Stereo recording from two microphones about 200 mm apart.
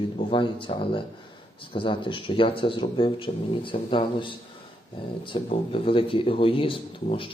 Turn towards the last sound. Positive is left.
turn(degrees=25)  # may be behind; listen again after turning